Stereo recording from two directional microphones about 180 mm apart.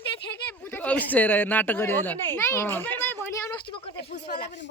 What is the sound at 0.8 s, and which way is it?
Speech, 10° left (ahead or behind).